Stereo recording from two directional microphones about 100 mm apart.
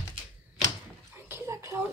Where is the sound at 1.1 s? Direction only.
20° right (ahead or behind).